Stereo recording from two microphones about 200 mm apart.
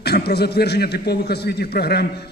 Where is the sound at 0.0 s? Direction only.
55° left (ahead or behind).